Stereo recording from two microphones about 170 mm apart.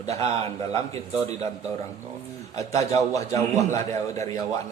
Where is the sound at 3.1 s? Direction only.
20° left (ahead or behind).